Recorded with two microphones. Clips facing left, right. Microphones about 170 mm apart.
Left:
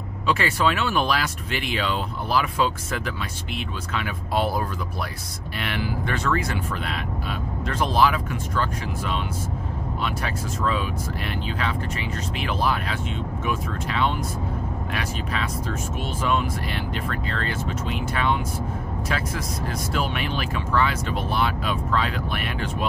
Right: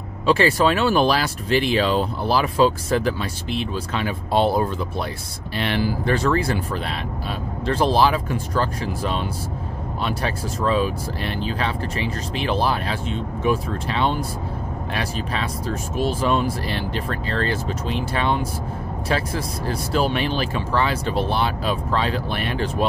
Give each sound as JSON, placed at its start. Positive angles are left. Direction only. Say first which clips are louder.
{"t": 0.3, "sound": "speech", "louder": "right 5 dB", "side_deg": -35}